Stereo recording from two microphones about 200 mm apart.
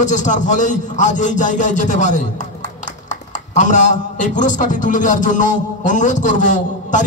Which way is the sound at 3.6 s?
35° left (ahead or behind).